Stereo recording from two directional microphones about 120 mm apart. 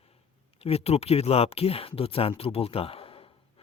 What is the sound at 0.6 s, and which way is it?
Speech, 55° left (ahead or behind).